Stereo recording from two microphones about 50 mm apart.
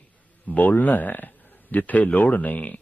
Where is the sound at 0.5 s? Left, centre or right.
Left.